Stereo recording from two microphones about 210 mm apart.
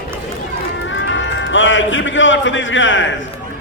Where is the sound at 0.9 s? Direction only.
60° left (ahead or behind).